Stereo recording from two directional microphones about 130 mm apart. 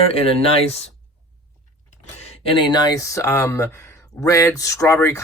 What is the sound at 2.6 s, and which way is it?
Speech, 35° left (ahead or behind).